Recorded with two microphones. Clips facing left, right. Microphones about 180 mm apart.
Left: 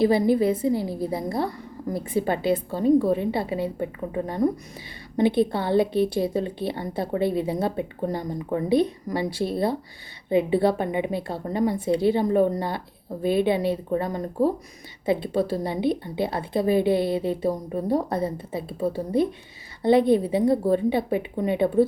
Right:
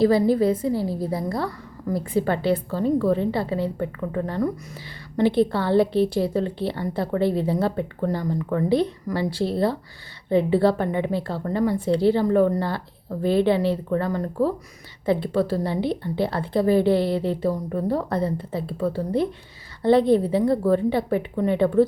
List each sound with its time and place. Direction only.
0.0 s a woman's voice: 20° left (ahead or behind)